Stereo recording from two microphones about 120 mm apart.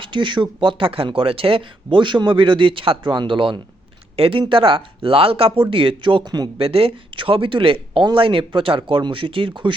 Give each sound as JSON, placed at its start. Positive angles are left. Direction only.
{"t": 0.0, "sound": "speech", "side_deg": -40}
{"t": 6.6, "sound": "speech", "side_deg": -50}